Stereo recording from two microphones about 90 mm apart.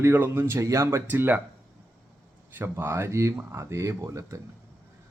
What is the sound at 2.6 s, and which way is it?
A man's voice, 25° right (ahead or behind).